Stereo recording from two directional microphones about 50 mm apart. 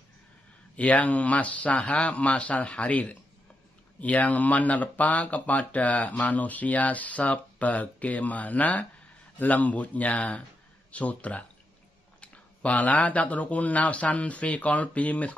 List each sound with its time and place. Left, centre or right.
0.7 s speech: left